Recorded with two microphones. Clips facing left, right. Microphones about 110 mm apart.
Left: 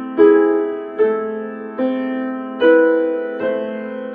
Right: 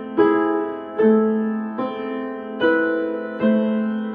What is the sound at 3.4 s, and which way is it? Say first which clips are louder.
Music: right 2 dB; 20° right (ahead or behind).